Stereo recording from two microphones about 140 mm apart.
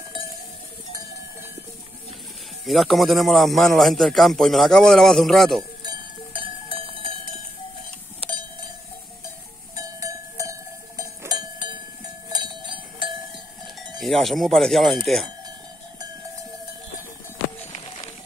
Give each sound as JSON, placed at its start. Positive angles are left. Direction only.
{"t": 2.6, "sound": "a man's voice", "side_deg": 0}
{"t": 5.6, "sound": "cowbell", "side_deg": -35}
{"t": 9.8, "sound": "cowbell", "side_deg": -25}
{"t": 13.7, "sound": "a man's voice", "side_deg": 0}
{"t": 17.7, "sound": "a sound", "side_deg": 40}